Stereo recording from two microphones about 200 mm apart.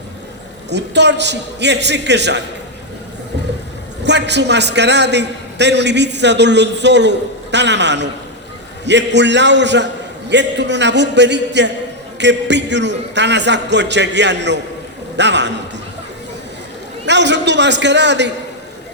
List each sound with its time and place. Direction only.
0.7 s a man's voice: 60° right (ahead or behind)
4.0 s a man's voice: 60° right (ahead or behind)
17.1 s a man's voice: 60° right (ahead or behind)